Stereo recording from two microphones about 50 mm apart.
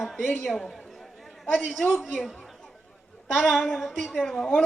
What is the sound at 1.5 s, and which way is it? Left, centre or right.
Speech, centre.